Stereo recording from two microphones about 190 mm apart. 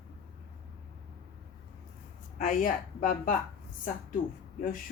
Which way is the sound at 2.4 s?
45° left (ahead or behind).